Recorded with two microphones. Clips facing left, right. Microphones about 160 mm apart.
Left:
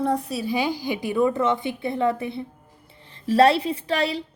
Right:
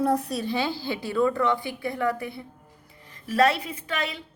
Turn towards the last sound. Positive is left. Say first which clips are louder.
# left 7 dB
turn(degrees=35)  # may be behind; listen again after turning